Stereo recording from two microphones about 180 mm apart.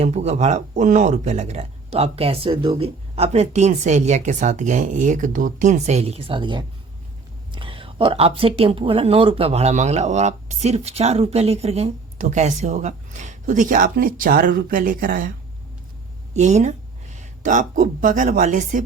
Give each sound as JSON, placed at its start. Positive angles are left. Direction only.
{"t": 0.0, "sound": "speech", "side_deg": -35}
{"t": 16.3, "sound": "speech", "side_deg": -40}